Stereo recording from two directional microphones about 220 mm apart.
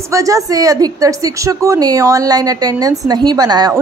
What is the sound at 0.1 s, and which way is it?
A woman's voice, 15° right (ahead or behind).